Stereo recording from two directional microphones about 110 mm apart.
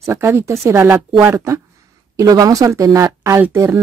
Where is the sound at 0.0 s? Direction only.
25° right (ahead or behind).